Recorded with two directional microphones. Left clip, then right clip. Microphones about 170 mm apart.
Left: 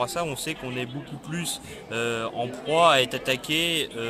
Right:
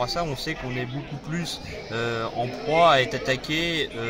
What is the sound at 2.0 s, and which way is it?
A man's voice, 10° left (ahead or behind).